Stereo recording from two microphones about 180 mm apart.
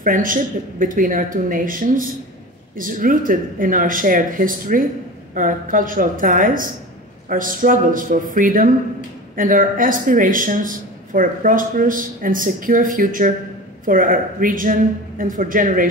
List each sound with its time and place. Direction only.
0.0 s a man's voice: 50° right (ahead or behind)